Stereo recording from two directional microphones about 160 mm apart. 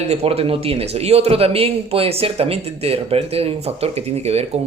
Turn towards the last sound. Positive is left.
turn(degrees=-40)  # may be behind; listen again after turning